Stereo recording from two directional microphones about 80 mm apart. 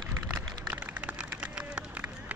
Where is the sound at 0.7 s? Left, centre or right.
Centre.